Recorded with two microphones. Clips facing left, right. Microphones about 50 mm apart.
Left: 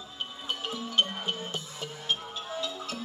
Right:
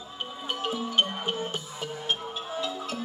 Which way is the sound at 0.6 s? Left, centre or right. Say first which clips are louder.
Right 3 dB; centre.